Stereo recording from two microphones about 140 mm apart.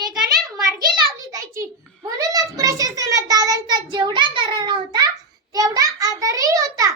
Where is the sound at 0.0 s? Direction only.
30° right (ahead or behind).